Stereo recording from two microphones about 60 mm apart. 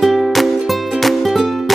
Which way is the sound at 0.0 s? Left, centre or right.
Centre.